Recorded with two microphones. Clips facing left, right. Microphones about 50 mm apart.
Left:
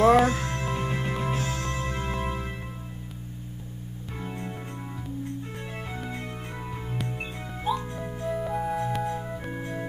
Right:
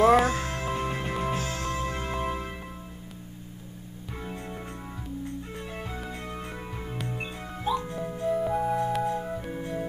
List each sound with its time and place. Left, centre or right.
0.0 s music: centre
4.1 s music: centre
9.5 s organ: centre